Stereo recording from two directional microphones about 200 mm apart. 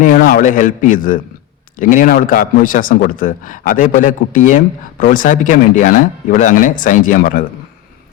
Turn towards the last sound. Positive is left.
turn(degrees=45)  # may be behind; listen again after turning